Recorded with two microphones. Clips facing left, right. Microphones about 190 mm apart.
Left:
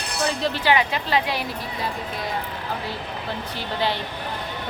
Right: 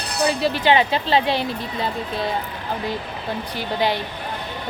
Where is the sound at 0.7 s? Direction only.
30° right (ahead or behind).